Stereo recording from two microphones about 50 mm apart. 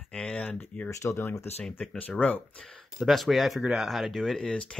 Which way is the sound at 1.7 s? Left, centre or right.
Left.